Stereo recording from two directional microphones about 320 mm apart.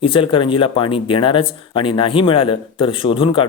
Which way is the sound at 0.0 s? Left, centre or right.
Centre.